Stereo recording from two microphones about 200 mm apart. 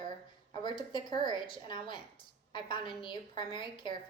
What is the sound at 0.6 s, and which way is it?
A woman's voice, 25° left (ahead or behind).